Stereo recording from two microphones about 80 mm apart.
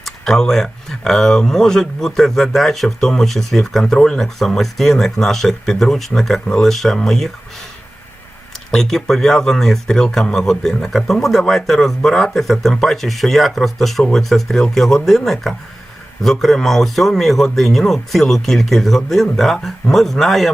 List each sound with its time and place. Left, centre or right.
0.0 s speech: centre
8.7 s speech: centre